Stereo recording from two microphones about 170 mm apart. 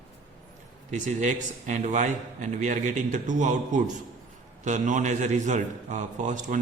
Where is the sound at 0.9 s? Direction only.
45° right (ahead or behind).